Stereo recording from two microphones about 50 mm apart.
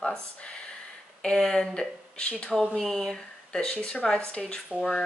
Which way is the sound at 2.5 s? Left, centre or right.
Centre.